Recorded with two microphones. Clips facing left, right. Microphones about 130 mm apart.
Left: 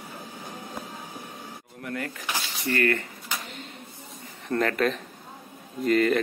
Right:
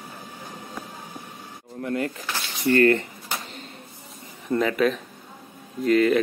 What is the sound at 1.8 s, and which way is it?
Speech, 25° right (ahead or behind).